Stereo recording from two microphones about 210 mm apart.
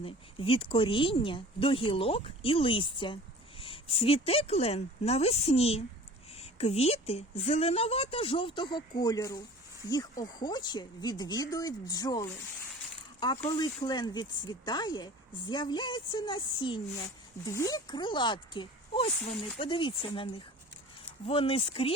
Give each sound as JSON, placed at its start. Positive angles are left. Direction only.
{"t": 0.0, "sound": "speech", "side_deg": 25}